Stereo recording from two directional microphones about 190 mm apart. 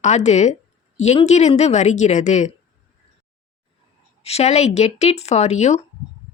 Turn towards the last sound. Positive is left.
turn(degrees=35)  # may be behind; listen again after turning